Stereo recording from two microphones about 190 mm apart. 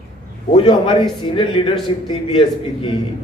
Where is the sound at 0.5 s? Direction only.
30° left (ahead or behind).